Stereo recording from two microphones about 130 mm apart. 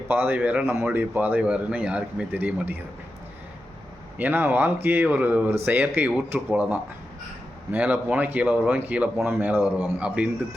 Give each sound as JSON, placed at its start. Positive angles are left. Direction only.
{"t": 0.1, "sound": "a man's voice", "side_deg": -15}
{"t": 4.2, "sound": "a man's voice", "side_deg": -15}